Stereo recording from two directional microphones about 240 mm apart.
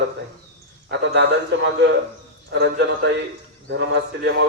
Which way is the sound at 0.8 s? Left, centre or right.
Right.